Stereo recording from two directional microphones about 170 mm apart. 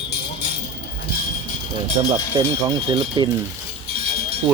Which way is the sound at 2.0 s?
35° right (ahead or behind).